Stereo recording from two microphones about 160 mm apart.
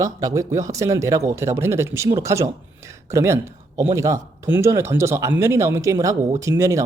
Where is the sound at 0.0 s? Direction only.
20° right (ahead or behind).